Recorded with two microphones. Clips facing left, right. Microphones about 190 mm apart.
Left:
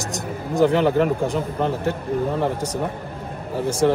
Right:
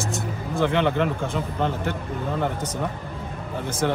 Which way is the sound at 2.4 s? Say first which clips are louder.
Left 4 dB; 35° left (ahead or behind).